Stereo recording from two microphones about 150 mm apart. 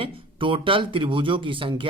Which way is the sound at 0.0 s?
35° right (ahead or behind).